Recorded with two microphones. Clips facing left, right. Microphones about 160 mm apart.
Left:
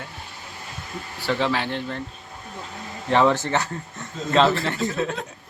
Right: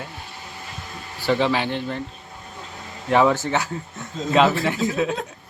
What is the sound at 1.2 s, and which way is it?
Speech, 10° right (ahead or behind).